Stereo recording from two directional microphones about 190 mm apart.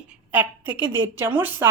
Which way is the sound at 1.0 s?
10° right (ahead or behind).